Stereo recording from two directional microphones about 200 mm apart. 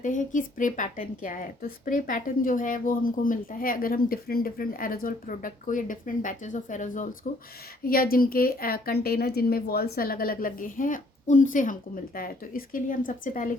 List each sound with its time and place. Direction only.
0.0 s speech: 40° left (ahead or behind)